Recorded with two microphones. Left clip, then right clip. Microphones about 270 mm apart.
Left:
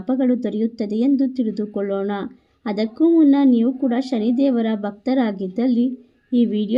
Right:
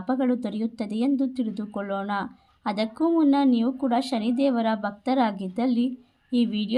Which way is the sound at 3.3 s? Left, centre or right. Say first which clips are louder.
Left 5 dB; right.